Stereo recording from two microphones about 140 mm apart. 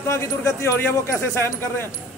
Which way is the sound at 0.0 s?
20° left (ahead or behind).